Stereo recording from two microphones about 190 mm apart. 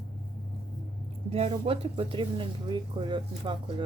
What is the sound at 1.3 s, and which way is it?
Speech, 30° right (ahead or behind).